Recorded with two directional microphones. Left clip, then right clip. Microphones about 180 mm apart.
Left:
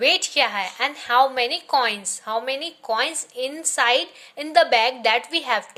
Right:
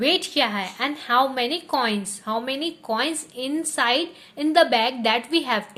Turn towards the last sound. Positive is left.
turn(degrees=15)  # may be behind; listen again after turning